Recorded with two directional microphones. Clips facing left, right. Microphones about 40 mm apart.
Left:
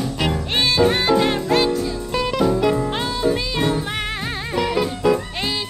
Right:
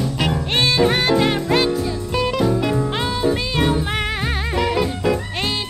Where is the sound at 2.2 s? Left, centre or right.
Centre.